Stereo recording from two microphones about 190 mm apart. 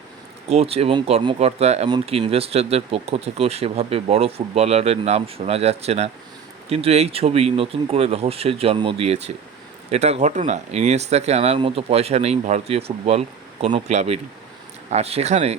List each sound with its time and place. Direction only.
0.5 s speech: 30° right (ahead or behind)